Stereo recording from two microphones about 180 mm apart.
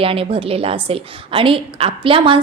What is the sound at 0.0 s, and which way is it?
A woman's voice, 30° right (ahead or behind).